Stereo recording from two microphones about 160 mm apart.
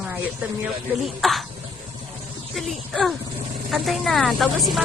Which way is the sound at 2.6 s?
Centre (ahead or behind).